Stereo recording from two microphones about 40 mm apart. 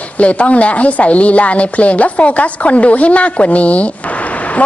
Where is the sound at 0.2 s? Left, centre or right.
Left.